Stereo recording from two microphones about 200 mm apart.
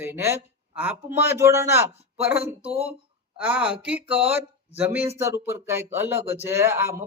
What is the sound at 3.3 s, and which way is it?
Speech, 5° right (ahead or behind).